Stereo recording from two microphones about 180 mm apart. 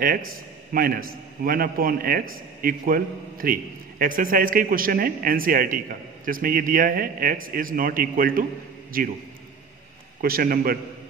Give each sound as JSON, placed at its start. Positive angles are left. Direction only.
{"t": 0.7, "sound": "a man's voice", "side_deg": -55}
{"t": 10.2, "sound": "a man's voice", "side_deg": -55}